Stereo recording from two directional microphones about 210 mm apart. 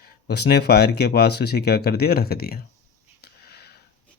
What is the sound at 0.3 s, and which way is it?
Speech, 50° left (ahead or behind).